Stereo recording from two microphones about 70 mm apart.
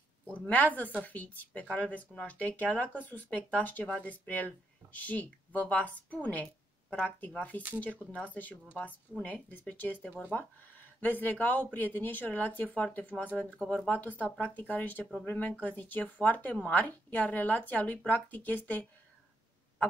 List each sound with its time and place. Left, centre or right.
0.3 s speech: left